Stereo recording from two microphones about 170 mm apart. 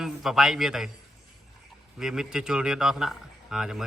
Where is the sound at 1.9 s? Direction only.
5° right (ahead or behind).